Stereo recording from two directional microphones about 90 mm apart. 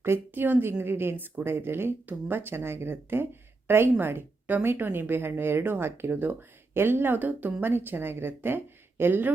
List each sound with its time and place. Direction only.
0.0 s a woman's voice: 25° right (ahead or behind)